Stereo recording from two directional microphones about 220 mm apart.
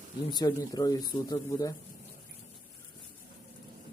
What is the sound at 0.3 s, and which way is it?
Speech, 20° left (ahead or behind).